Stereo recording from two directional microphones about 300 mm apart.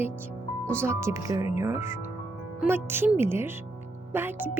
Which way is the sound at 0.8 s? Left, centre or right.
Centre.